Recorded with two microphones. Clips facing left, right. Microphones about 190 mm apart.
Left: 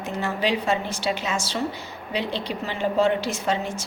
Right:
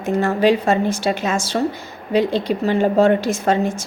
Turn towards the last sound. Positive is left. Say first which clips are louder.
# right 7 dB
turn(degrees=-50)  # may be behind; listen again after turning